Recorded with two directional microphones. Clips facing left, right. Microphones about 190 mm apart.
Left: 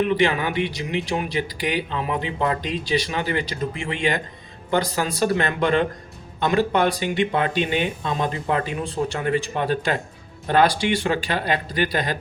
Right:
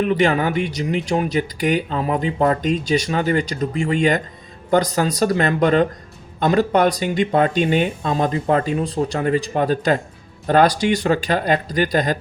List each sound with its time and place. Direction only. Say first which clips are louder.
0.2 s speech: right 3 dB; 45° right (ahead or behind)